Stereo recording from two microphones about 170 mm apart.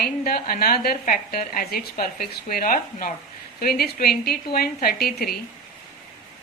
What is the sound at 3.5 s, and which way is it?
A woman's voice, 65° left (ahead or behind).